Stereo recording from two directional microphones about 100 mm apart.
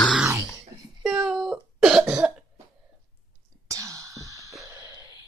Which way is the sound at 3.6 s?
35° right (ahead or behind).